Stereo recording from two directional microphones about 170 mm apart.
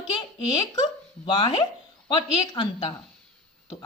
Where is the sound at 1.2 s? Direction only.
30° left (ahead or behind).